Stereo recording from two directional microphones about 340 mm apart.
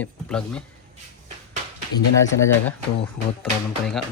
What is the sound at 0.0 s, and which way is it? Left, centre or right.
Speech, centre.